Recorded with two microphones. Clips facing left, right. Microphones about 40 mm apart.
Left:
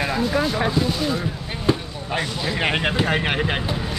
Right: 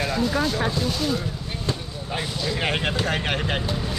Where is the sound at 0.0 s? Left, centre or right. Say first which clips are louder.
Left 2 dB; centre.